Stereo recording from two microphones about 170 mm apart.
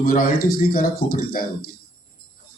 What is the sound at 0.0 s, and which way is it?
Speech, 60° left (ahead or behind).